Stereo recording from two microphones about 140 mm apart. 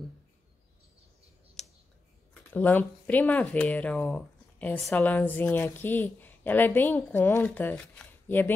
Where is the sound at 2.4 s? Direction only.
15° left (ahead or behind).